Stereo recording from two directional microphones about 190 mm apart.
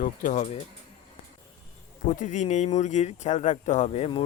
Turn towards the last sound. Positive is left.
turn(degrees=30)  # may be behind; listen again after turning